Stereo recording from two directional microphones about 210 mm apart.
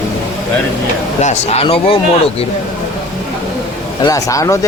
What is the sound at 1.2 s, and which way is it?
Speech, 30° left (ahead or behind).